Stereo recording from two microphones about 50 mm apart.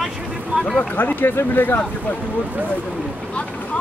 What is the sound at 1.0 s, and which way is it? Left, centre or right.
Speech, left.